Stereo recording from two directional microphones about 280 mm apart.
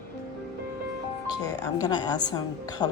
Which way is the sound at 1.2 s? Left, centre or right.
Centre.